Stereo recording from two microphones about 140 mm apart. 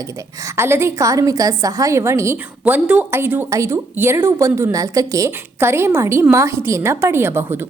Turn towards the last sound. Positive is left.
turn(degrees=-15)  # may be behind; listen again after turning